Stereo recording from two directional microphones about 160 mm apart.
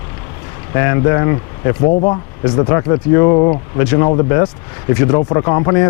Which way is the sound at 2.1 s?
30° left (ahead or behind).